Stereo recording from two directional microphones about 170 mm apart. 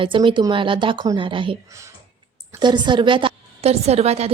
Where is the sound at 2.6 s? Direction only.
25° right (ahead or behind).